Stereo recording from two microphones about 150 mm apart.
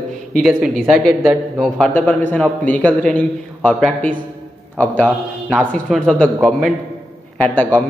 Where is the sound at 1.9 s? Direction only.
15° left (ahead or behind).